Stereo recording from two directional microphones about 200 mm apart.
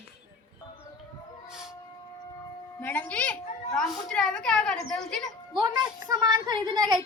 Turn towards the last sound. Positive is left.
turn(degrees=-20)  # may be behind; listen again after turning